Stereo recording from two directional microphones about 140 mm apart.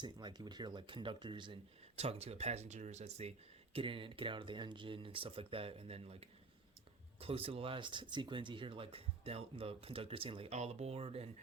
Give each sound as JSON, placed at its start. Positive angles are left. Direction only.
{"t": 0.0, "sound": "speech", "side_deg": -30}
{"t": 2.0, "sound": "speech", "side_deg": -45}